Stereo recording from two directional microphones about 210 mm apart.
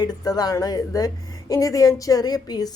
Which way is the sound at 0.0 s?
20° left (ahead or behind).